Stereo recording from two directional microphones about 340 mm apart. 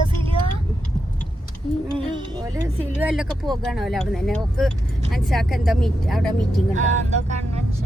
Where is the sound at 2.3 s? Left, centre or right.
Centre.